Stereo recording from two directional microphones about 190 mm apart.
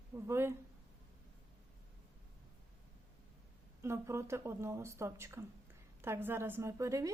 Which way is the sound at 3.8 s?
15° right (ahead or behind).